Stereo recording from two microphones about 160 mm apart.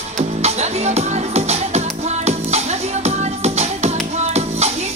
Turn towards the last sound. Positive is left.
turn(degrees=-45)  # may be behind; listen again after turning